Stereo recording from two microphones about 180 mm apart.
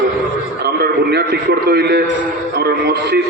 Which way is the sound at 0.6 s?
65° right (ahead or behind).